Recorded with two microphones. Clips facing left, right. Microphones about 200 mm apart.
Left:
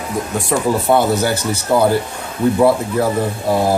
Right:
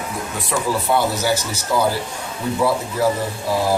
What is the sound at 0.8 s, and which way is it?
Speech, 55° left (ahead or behind).